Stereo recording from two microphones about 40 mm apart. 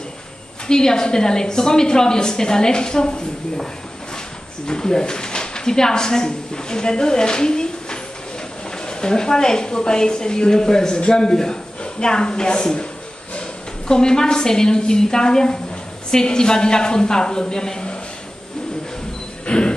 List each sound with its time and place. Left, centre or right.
0.7 s a woman's voice: centre
4.6 s a woman's voice: centre
19.4 s a sound: left